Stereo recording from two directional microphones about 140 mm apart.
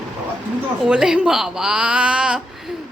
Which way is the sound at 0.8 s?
5° right (ahead or behind).